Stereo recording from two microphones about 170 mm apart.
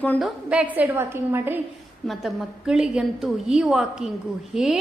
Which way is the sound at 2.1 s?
Centre (ahead or behind).